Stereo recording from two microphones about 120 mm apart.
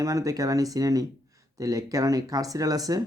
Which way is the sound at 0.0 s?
25° right (ahead or behind).